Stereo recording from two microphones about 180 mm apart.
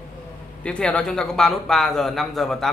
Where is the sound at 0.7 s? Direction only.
5° left (ahead or behind).